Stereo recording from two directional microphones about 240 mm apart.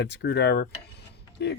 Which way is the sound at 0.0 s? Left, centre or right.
Left.